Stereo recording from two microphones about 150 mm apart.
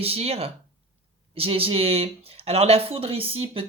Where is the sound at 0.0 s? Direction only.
40° right (ahead or behind).